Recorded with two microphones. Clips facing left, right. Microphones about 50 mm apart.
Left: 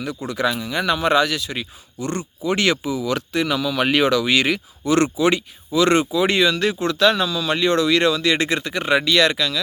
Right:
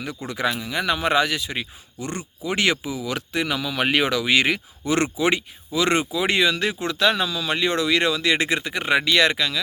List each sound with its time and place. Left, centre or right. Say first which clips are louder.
0.0 s speech: left 3 dB; right
0.7 s speech: left 2 dB; centre
0.9 s speech: left 3 dB; centre